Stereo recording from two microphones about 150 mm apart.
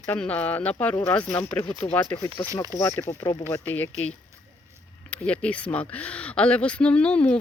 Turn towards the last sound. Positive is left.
turn(degrees=5)  # may be behind; listen again after turning